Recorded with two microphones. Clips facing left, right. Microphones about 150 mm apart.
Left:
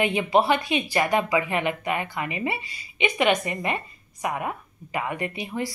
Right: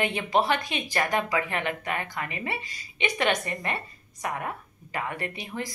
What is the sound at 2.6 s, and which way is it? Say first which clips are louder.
Speech: even; 40° right (ahead or behind).